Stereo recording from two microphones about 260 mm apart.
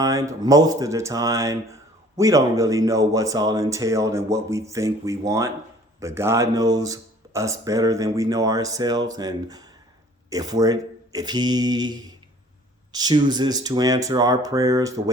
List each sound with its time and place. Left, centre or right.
0.0 s speech: centre